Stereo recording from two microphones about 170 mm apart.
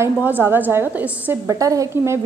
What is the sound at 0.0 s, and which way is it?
A woman's voice, 10° right (ahead or behind).